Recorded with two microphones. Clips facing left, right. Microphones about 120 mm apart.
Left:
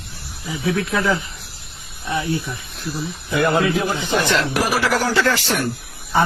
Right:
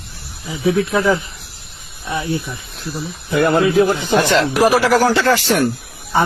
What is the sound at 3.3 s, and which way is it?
Speech, 45° right (ahead or behind).